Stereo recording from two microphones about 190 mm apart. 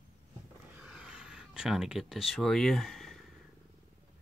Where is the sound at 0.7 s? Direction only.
5° right (ahead or behind).